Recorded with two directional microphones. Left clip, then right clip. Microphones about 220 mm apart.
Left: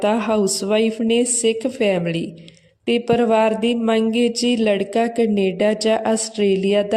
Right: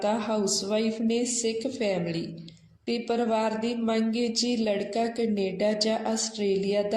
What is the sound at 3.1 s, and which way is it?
Speech, 55° left (ahead or behind).